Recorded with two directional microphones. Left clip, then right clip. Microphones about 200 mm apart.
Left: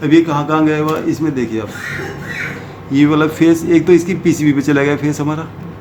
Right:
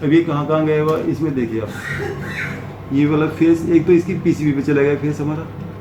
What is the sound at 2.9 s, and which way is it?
Speech, 45° left (ahead or behind).